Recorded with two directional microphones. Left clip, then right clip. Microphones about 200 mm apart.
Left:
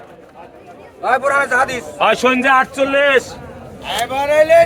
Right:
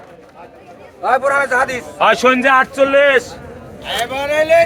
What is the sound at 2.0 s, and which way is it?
Speech, 15° right (ahead or behind).